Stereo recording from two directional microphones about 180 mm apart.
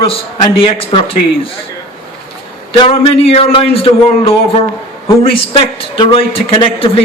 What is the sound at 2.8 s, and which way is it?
A man's voice, 30° left (ahead or behind).